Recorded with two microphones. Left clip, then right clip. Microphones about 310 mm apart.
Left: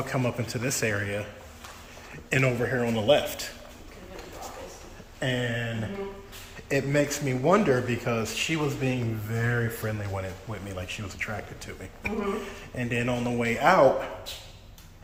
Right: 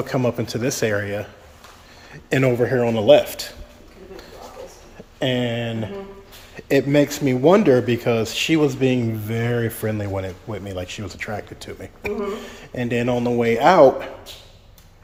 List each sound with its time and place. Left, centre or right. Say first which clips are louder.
0.0 s speech: right 7 dB; right
2.3 s speech: right 7 dB; right
5.2 s speech: right 7 dB; right